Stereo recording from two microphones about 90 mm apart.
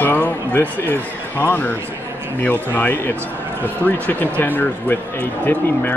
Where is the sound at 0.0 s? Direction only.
20° left (ahead or behind).